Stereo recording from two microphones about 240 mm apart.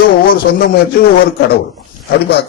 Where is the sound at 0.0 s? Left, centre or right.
Left.